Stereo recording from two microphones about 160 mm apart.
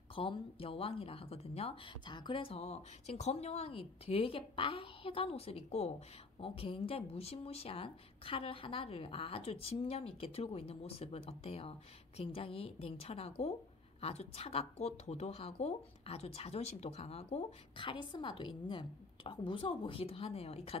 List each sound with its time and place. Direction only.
0.1 s speech: 35° left (ahead or behind)